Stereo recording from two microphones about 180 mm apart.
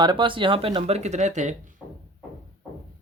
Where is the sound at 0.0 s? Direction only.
25° right (ahead or behind); by 1.5 s 40° right (ahead or behind).